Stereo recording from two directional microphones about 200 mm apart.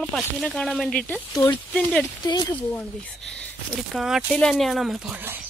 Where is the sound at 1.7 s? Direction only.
5° left (ahead or behind).